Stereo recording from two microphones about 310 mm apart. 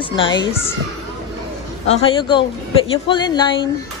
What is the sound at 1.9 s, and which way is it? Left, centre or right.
Speech, centre.